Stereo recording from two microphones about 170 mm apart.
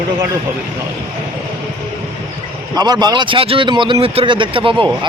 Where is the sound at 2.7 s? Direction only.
25° right (ahead or behind).